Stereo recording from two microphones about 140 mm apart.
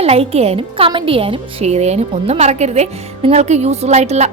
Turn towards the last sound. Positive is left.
turn(degrees=-50)  # may be behind; listen again after turning